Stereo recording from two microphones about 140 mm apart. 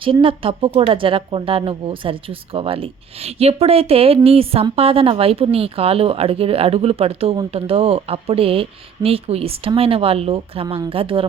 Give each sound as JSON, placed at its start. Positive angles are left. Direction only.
{"t": 0.0, "sound": "speech", "side_deg": -40}